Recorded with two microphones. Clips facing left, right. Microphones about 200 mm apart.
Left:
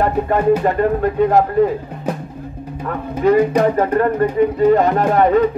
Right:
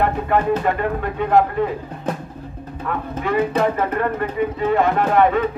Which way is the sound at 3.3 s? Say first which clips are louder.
Left 6 dB; 40° left (ahead or behind).